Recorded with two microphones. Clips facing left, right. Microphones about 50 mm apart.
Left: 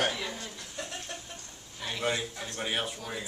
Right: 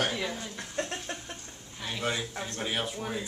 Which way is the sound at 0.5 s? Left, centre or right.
Right.